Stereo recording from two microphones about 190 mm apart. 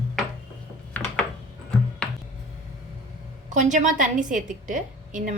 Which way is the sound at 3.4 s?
40° right (ahead or behind).